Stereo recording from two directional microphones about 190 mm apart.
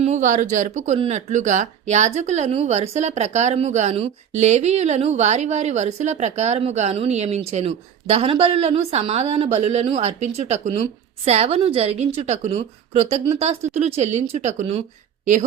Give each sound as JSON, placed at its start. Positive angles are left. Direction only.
{"t": 0.0, "sound": "speech", "side_deg": -40}